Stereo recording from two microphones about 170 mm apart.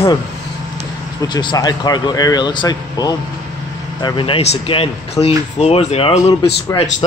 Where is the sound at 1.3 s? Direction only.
25° left (ahead or behind).